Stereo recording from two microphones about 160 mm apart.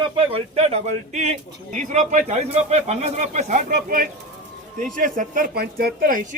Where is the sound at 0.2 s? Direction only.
40° right (ahead or behind).